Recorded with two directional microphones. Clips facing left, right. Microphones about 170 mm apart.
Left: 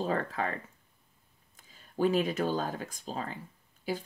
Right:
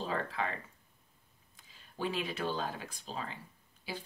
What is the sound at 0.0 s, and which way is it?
Speech, 45° left (ahead or behind).